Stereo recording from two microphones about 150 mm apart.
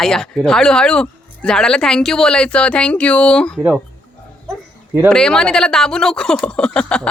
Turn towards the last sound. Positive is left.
turn(degrees=5)  # may be behind; listen again after turning